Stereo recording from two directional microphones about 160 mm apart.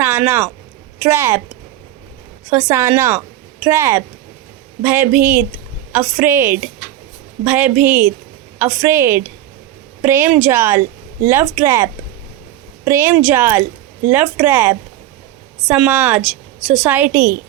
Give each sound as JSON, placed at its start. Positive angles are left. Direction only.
{"t": 0.0, "sound": "speech", "side_deg": -15}
{"t": 2.5, "sound": "a woman's voice", "side_deg": -15}